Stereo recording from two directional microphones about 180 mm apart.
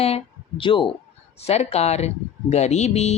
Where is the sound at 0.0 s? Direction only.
30° left (ahead or behind).